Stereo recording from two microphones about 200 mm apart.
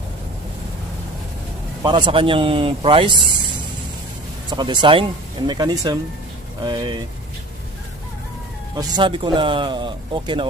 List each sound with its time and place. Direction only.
1.8 s speech: 20° right (ahead or behind)
8.7 s speech: 20° right (ahead or behind)